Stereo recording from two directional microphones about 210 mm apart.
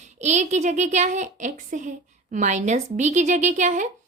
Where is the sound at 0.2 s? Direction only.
35° right (ahead or behind).